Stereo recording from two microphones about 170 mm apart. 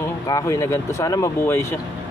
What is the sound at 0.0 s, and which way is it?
Speech, 20° left (ahead or behind).